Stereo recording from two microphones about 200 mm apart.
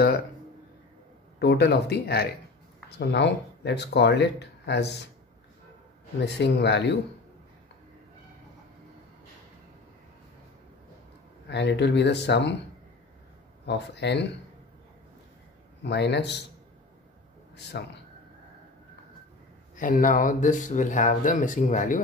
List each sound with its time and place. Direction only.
1.4 s speech: 55° left (ahead or behind)
6.2 s speech: 60° left (ahead or behind)
11.4 s speech: 60° left (ahead or behind)
13.7 s speech: 60° left (ahead or behind)
15.8 s speech: 60° left (ahead or behind)
17.7 s speech: 55° left (ahead or behind)
19.7 s speech: 40° left (ahead or behind)